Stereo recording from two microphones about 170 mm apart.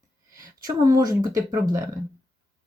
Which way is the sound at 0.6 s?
20° right (ahead or behind).